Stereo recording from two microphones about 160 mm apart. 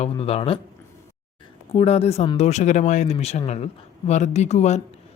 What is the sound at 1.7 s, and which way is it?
Speech, 40° left (ahead or behind).